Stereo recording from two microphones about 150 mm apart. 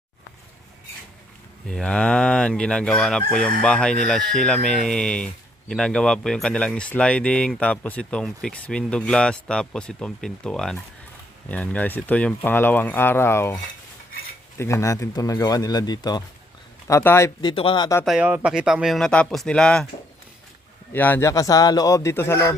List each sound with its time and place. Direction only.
1.6 s speech: 5° left (ahead or behind)
14.6 s speech: 20° left (ahead or behind)
17.4 s speech: 35° left (ahead or behind)
18.0 s speech: centre (ahead or behind)
20.9 s speech: 10° left (ahead or behind)